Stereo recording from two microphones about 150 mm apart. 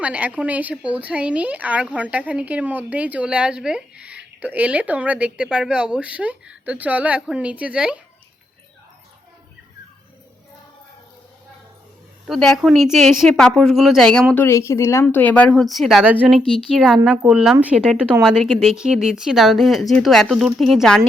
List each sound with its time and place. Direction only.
0.0 s a woman's voice: 10° right (ahead or behind)
12.2 s a woman's voice: centre (ahead or behind)
14.4 s a woman's voice: 20° left (ahead or behind)